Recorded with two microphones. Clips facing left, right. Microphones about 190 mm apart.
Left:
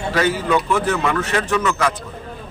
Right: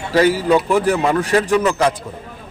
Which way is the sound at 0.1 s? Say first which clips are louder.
Right 5 dB; 35° right (ahead or behind).